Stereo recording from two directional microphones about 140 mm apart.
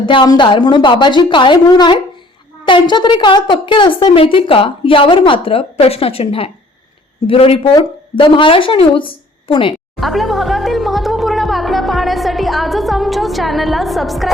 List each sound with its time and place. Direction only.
0.0 s a woman's voice: 35° left (ahead or behind)
10.0 s speech: centre (ahead or behind)